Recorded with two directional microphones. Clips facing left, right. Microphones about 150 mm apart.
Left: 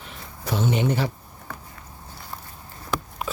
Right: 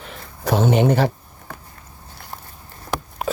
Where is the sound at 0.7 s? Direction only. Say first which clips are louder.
Right 6 dB; 75° right (ahead or behind).